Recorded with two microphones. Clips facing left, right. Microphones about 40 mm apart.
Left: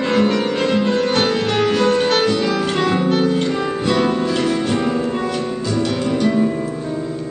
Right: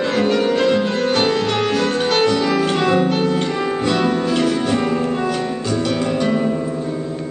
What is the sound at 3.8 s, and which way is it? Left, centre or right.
Music, centre.